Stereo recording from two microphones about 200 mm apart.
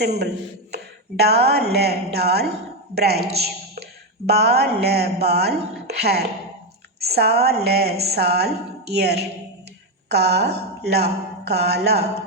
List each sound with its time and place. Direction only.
1.2 s a woman's voice: 55° right (ahead or behind)